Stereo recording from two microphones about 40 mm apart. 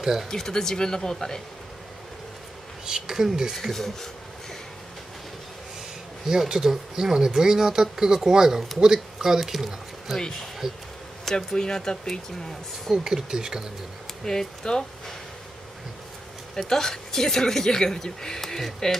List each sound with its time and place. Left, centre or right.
0.0 s speech: centre
0.3 s speech: centre
2.8 s speech: centre
3.7 s speech: centre
6.2 s speech: centre
11.3 s speech: centre
12.9 s speech: centre
14.2 s speech: centre
16.6 s speech: centre